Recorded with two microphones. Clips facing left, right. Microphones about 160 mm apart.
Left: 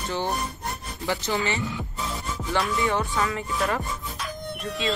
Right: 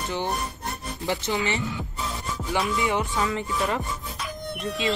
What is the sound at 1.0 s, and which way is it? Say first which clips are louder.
Speech: even; 20° right (ahead or behind).